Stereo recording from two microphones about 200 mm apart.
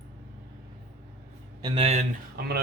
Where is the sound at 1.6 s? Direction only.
25° right (ahead or behind).